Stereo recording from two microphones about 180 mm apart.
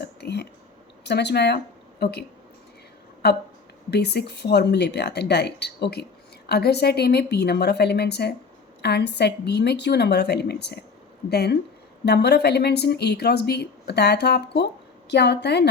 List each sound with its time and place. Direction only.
0.0 s a sound: 65° left (ahead or behind)
1.0 s speech: 65° left (ahead or behind)
3.2 s speech: 65° left (ahead or behind)